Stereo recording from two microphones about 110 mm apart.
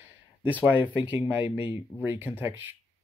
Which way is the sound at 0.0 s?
15° right (ahead or behind).